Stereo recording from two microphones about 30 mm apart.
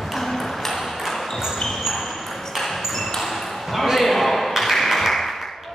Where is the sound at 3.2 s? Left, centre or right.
Centre.